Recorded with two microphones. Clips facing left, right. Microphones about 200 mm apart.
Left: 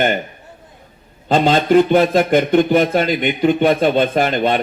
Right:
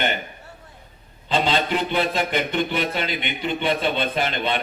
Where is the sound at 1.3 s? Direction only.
45° left (ahead or behind).